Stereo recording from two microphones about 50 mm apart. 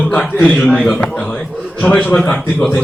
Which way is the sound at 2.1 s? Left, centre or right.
Left.